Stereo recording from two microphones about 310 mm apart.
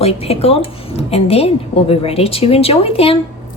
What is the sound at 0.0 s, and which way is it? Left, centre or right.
A woman's voice, centre.